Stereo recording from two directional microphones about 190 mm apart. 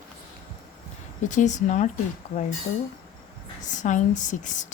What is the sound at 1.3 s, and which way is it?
Speech, 40° left (ahead or behind).